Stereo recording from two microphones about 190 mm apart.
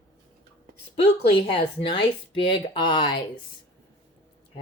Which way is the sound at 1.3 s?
25° left (ahead or behind).